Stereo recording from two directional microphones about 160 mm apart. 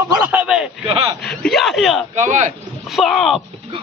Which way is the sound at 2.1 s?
50° right (ahead or behind).